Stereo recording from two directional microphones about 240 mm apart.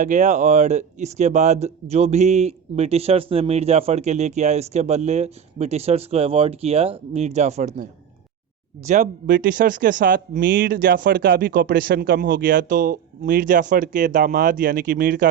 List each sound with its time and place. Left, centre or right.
0.0 s speech: right
8.9 s speech: right